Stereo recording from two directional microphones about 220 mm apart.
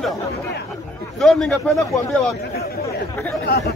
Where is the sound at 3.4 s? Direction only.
45° left (ahead or behind).